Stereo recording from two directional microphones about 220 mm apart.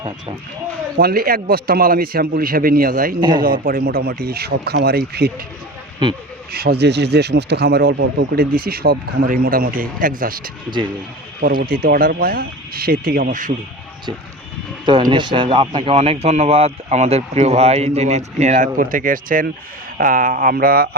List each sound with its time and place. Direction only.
0.9 s a man's voice: 45° right (ahead or behind)
3.2 s speech: 20° right (ahead or behind)
3.4 s speech: 40° right (ahead or behind)
6.0 s speech: 20° right (ahead or behind)
6.5 s speech: 45° right (ahead or behind)
11.6 s a man's voice: 40° right (ahead or behind)
15.1 s a man's voice: 20° right (ahead or behind); by 20.9 s 45° right (ahead or behind)